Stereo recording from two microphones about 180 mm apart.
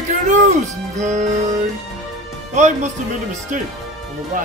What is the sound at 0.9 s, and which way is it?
Music, 40° right (ahead or behind).